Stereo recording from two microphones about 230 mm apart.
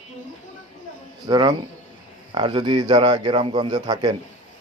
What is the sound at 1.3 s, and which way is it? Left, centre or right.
A man's voice, centre.